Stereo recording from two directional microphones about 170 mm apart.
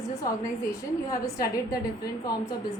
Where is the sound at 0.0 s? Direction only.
20° left (ahead or behind).